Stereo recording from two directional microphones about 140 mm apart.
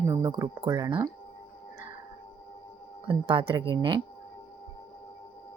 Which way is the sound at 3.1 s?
35° right (ahead or behind).